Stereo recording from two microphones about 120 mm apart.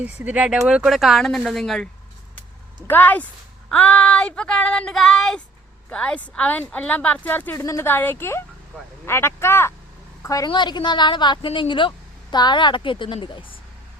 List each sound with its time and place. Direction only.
0.0 s speech: 15° right (ahead or behind); by 1.9 s 5° left (ahead or behind)
2.8 s speech: 15° left (ahead or behind)
4.3 s speech: 10° left (ahead or behind); by 10.5 s 30° left (ahead or behind)
10.5 s a woman's voice: 40° left (ahead or behind)